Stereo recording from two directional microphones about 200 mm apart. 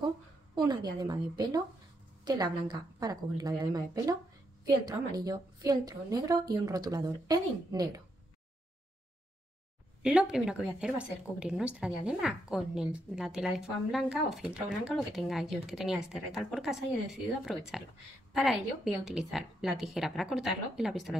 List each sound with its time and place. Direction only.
0.6 s a woman's voice: 20° right (ahead or behind)
10.0 s a woman's voice: 5° right (ahead or behind)